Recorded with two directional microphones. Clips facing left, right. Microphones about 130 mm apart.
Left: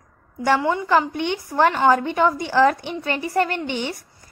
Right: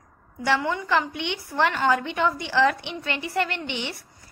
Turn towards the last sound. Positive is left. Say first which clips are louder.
# left 5 dB
turn(degrees=45)  # may be behind; listen again after turning